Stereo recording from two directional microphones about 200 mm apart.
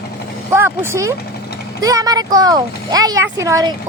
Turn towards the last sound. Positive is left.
turn(degrees=-15)  # may be behind; listen again after turning